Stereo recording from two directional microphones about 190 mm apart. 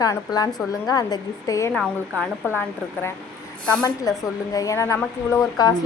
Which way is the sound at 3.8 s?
20° left (ahead or behind).